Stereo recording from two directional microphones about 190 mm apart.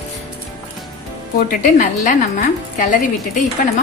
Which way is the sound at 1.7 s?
45° left (ahead or behind).